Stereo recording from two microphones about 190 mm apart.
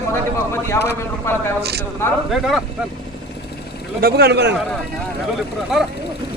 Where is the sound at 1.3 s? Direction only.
10° left (ahead or behind).